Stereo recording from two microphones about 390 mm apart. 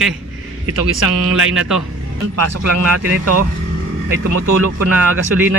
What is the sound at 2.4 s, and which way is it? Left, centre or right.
Speech, right.